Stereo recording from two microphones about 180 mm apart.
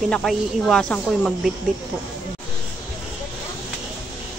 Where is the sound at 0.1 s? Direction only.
5° left (ahead or behind).